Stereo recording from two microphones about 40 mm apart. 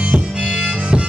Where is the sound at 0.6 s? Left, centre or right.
Right.